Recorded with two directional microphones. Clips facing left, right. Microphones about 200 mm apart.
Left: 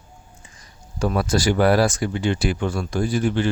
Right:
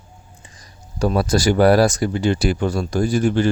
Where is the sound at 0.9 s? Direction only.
35° right (ahead or behind).